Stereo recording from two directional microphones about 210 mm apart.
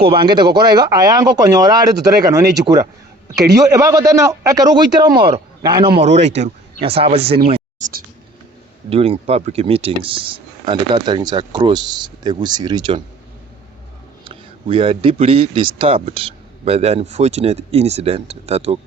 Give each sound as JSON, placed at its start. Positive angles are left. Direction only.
{"t": 0.0, "sound": "a man's voice", "side_deg": -25}
{"t": 5.9, "sound": "speech", "side_deg": -30}
{"t": 8.9, "sound": "a man's voice", "side_deg": -30}
{"t": 14.3, "sound": "a man's voice", "side_deg": -25}